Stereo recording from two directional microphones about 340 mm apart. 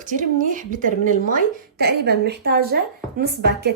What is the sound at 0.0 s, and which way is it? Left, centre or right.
A woman's voice, right.